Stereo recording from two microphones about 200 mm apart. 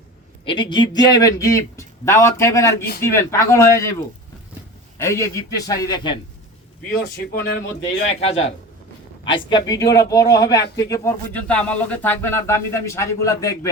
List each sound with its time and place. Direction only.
0.4 s speech: 25° left (ahead or behind)
4.9 s speech: 15° left (ahead or behind)
6.9 s speech: 50° left (ahead or behind)
8.1 s a man's voice: 30° left (ahead or behind)